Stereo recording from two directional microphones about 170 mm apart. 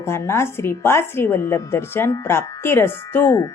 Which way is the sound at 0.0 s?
15° left (ahead or behind).